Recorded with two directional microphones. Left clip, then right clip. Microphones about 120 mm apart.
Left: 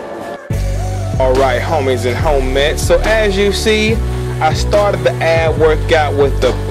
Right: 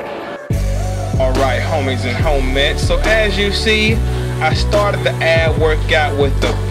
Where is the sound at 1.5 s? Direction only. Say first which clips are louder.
Left 4 dB; 65° left (ahead or behind).